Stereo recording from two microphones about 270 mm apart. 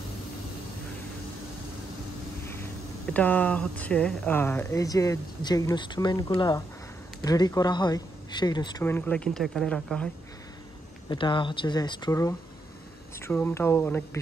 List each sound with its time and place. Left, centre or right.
2.4 s speech: centre
11.1 s speech: centre